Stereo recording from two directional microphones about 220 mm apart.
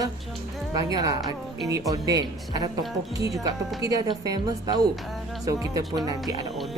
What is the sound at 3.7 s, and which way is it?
A woman's voice, 15° right (ahead or behind).